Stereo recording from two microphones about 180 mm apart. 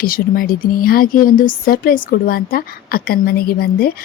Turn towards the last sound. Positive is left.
turn(degrees=60)  # may be behind; listen again after turning